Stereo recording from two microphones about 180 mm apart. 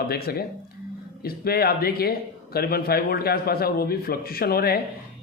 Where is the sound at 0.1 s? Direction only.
60° left (ahead or behind).